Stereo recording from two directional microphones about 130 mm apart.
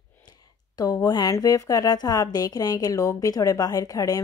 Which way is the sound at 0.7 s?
30° left (ahead or behind).